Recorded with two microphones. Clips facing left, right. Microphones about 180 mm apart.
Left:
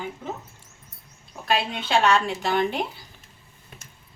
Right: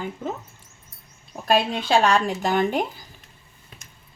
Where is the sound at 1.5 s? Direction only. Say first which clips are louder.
Right 4 dB; 40° right (ahead or behind).